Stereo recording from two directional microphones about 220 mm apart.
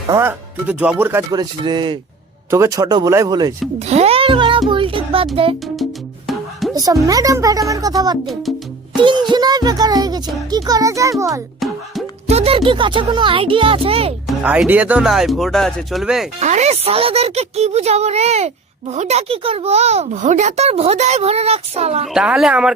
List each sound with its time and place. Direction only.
0.1 s speech: 10° right (ahead or behind)
3.8 s music: 30° right (ahead or behind)
5.8 s music: centre (ahead or behind)
6.7 s speech: 15° right (ahead or behind)
8.3 s music: centre (ahead or behind)
9.0 s speech: 20° right (ahead or behind)
12.3 s speech: 25° right (ahead or behind)
14.3 s speech: 5° right (ahead or behind)
16.4 s speech: 30° right (ahead or behind)
22.0 s speech: 5° right (ahead or behind)